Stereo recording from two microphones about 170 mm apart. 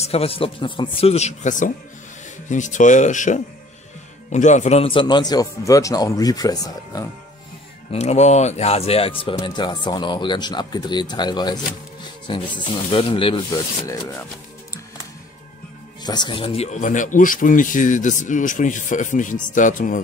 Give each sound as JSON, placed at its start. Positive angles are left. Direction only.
{"t": 0.0, "sound": "a man's voice", "side_deg": 35}
{"t": 7.9, "sound": "speech", "side_deg": 40}
{"t": 16.0, "sound": "speech", "side_deg": 25}